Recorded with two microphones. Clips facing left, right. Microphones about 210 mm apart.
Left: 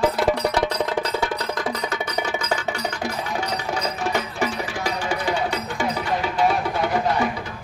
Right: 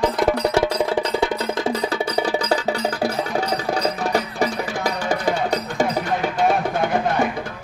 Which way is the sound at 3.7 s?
35° right (ahead or behind).